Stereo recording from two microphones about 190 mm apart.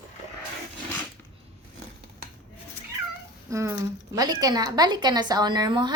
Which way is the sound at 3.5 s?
15° right (ahead or behind).